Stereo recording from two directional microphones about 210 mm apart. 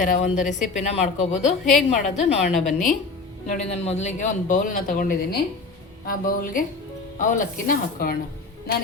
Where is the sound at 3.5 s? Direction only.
35° left (ahead or behind).